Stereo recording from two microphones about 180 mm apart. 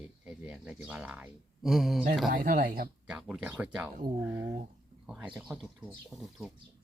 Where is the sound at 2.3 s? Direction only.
50° right (ahead or behind).